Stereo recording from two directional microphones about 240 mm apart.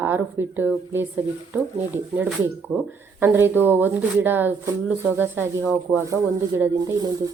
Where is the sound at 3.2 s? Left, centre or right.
Centre.